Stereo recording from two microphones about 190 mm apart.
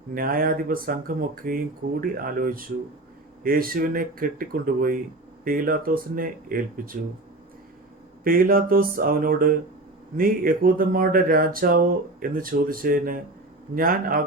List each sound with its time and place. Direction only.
0.1 s speech: 50° right (ahead or behind)
8.2 s speech: 50° right (ahead or behind)